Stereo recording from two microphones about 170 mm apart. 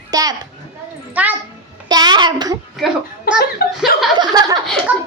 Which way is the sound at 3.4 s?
65° left (ahead or behind).